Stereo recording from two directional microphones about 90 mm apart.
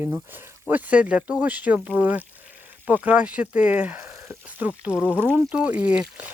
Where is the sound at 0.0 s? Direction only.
20° right (ahead or behind).